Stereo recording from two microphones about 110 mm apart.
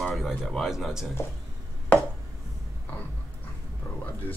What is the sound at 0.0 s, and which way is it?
Speech, centre (ahead or behind).